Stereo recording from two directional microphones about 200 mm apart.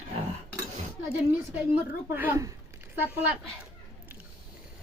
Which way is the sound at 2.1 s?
10° right (ahead or behind).